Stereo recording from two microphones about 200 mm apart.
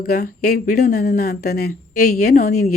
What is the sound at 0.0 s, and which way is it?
Speech, 50° left (ahead or behind).